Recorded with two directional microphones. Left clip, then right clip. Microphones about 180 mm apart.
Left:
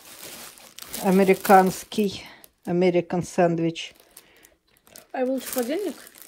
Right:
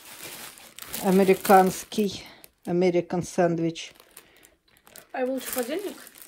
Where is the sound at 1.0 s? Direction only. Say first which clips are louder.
Left 1 dB; 5° right (ahead or behind).